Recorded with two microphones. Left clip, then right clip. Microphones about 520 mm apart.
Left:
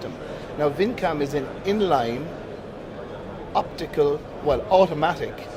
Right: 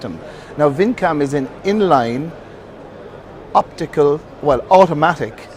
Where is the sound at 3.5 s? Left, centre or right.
Right.